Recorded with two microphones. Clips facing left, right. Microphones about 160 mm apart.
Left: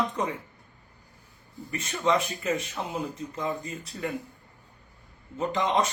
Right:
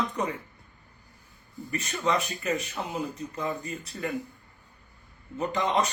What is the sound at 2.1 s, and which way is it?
Speech, 25° left (ahead or behind).